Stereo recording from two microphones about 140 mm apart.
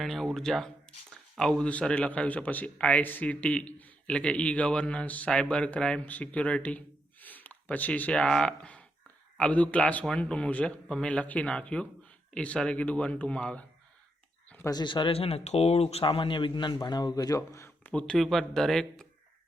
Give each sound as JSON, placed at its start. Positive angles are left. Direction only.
{"t": 0.0, "sound": "speech", "side_deg": 0}
{"t": 14.7, "sound": "speech", "side_deg": 30}
{"t": 17.9, "sound": "speech", "side_deg": 5}